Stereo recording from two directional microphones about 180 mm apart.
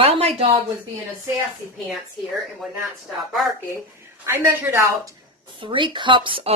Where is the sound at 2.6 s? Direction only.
Centre (ahead or behind).